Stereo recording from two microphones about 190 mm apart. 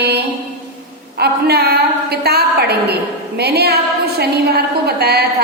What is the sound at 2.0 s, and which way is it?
A woman's voice, 55° right (ahead or behind).